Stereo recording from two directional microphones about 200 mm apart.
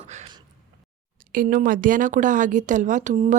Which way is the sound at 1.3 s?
45° right (ahead or behind).